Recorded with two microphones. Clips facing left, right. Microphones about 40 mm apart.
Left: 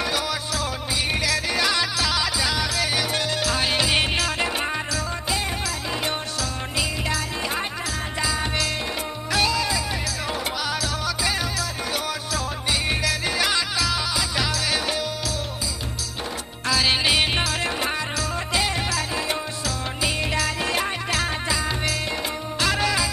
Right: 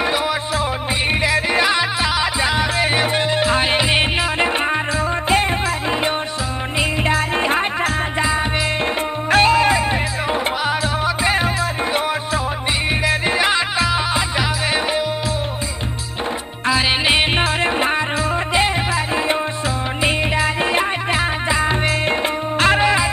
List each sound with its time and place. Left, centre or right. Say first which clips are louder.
1.2 s music: right 7 dB; right
7.1 s music: right 9 dB; right
10.3 s music: right 8 dB; right
13.0 s music: right 6 dB; right
16.6 s music: right 4 dB; right
20.0 s music: right 6 dB; right